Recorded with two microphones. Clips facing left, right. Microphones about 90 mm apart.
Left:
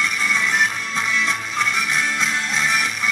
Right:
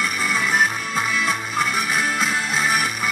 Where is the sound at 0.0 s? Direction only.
5° right (ahead or behind).